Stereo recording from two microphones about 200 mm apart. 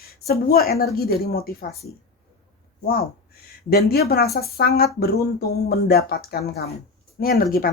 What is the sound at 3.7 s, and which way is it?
Speech, 50° left (ahead or behind).